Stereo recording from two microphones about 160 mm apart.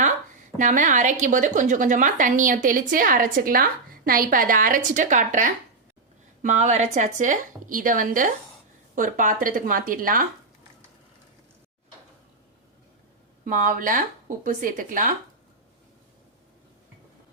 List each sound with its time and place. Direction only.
0.6 s a woman's voice: 50° right (ahead or behind)
13.4 s a woman's voice: 55° right (ahead or behind)